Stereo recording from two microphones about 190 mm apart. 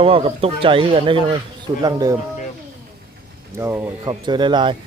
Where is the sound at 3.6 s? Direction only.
15° right (ahead or behind).